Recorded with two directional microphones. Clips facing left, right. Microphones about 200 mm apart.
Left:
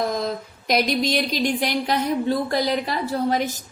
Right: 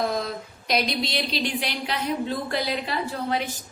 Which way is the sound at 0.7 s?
45° left (ahead or behind).